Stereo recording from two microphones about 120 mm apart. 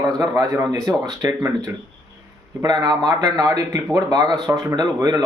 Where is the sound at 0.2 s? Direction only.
30° right (ahead or behind).